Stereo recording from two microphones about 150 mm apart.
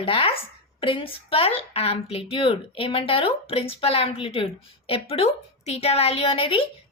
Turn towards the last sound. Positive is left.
turn(degrees=40)  # may be behind; listen again after turning